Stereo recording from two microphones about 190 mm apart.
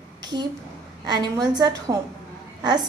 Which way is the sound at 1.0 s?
20° right (ahead or behind).